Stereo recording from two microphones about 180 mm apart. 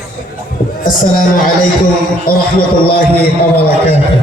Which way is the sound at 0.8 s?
50° left (ahead or behind).